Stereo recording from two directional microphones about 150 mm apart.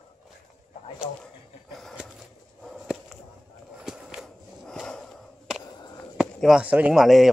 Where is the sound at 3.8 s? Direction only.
5° right (ahead or behind).